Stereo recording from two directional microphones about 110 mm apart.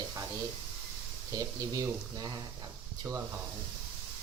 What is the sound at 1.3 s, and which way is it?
Speech, 35° right (ahead or behind).